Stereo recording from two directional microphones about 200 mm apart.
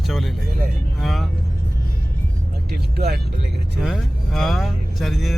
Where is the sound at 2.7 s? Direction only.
50° right (ahead or behind).